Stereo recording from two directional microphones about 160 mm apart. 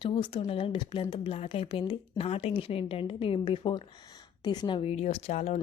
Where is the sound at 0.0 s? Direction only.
35° left (ahead or behind).